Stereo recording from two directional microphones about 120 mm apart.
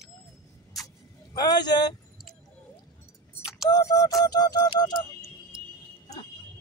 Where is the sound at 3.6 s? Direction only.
35° left (ahead or behind).